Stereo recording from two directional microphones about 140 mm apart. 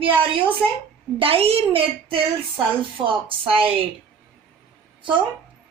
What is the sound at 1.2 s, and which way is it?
Speech, 45° right (ahead or behind).